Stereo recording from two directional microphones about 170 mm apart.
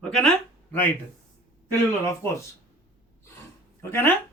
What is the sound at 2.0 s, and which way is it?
Speech, 15° left (ahead or behind).